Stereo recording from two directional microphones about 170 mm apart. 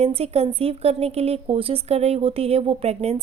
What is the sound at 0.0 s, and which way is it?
Speech, 35° right (ahead or behind).